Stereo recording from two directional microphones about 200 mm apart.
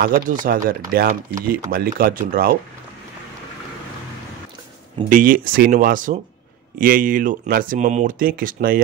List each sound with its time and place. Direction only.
0.0 s speech: 45° right (ahead or behind)
5.1 s speech: 45° right (ahead or behind)